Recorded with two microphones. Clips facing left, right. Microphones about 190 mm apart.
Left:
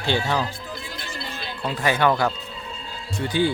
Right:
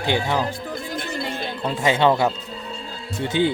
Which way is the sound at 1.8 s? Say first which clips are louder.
Right 2 dB; 25° right (ahead or behind).